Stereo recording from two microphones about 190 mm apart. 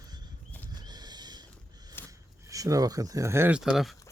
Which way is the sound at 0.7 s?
20° right (ahead or behind).